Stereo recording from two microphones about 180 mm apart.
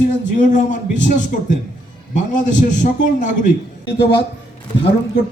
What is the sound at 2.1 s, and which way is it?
A man's voice, 45° left (ahead or behind).